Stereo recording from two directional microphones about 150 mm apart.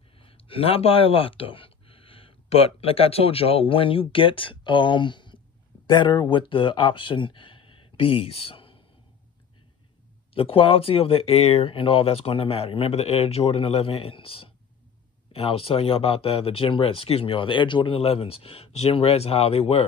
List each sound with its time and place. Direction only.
0.2 s speech: 40° left (ahead or behind)
10.3 s speech: 35° left (ahead or behind)